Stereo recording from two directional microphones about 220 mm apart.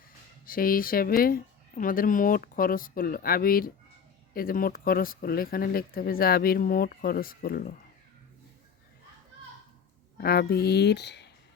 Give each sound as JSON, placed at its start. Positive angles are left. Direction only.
{"t": 0.4, "sound": "speech", "side_deg": 40}
{"t": 10.2, "sound": "speech", "side_deg": 45}